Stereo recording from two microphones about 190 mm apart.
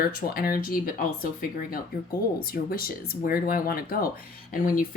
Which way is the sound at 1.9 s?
50° left (ahead or behind).